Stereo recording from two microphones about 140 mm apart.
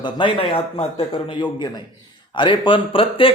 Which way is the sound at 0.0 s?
35° left (ahead or behind).